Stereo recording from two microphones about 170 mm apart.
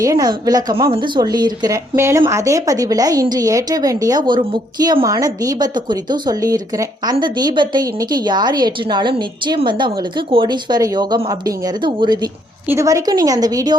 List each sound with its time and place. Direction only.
0.0 s a woman's voice: 20° right (ahead or behind)